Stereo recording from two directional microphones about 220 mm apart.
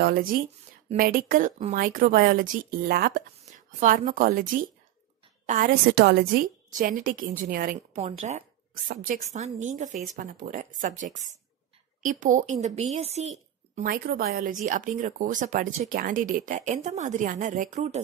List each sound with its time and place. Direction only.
0.0 s a woman's voice: 40° right (ahead or behind)